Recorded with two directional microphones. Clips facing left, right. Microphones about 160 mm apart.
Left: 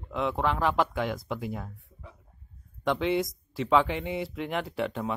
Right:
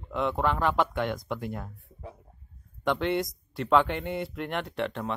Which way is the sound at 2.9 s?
Centre (ahead or behind).